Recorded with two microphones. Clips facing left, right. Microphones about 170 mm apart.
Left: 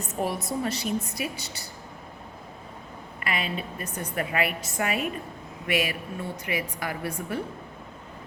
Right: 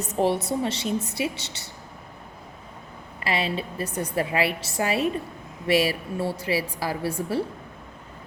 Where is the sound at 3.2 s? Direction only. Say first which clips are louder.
Right 4 dB; 30° right (ahead or behind).